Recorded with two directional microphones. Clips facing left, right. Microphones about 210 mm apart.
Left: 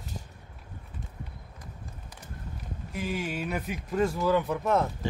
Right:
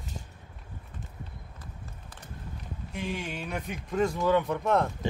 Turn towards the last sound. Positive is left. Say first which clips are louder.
# even
turn(degrees=0)  # may be behind; listen again after turning